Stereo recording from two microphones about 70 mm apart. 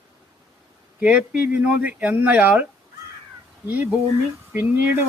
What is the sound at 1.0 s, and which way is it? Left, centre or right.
Speech, centre.